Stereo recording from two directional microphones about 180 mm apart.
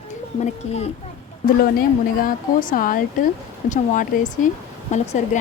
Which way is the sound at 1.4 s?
55° left (ahead or behind).